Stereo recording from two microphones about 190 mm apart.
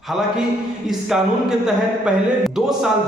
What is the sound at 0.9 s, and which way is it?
Music, 5° right (ahead or behind).